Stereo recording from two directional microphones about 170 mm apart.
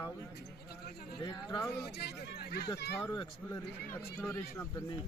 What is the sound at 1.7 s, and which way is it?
Speech, 70° left (ahead or behind).